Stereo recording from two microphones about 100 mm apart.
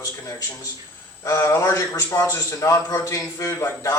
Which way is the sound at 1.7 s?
35° left (ahead or behind).